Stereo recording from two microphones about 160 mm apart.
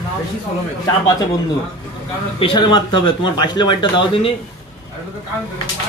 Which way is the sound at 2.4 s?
30° left (ahead or behind).